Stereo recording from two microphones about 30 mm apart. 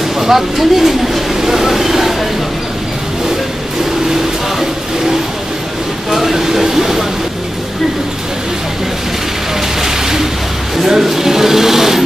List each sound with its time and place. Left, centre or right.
0.2 s speech: centre
6.0 s speech: centre
9.8 s a sound: centre
10.8 s speech: centre